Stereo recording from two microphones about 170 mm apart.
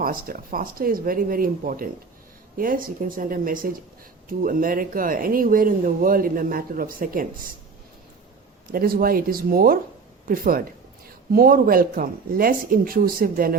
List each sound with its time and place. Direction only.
0.0 s speech: 55° right (ahead or behind)
8.7 s speech: 60° right (ahead or behind)